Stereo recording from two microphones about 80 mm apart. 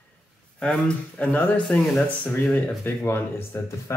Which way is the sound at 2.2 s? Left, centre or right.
Centre.